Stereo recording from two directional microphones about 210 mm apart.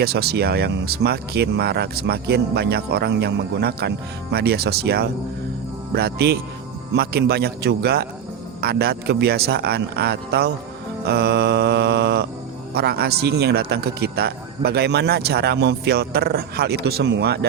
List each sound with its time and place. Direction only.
0.0 s speech: 50° right (ahead or behind)